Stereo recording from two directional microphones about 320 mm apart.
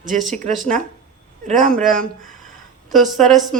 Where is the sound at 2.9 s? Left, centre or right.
Centre.